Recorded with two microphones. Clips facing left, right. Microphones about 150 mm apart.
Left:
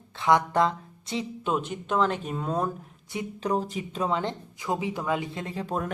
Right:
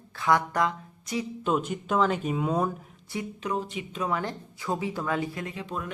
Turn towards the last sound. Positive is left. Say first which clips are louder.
# left 4 dB
turn(degrees=40)  # may be behind; listen again after turning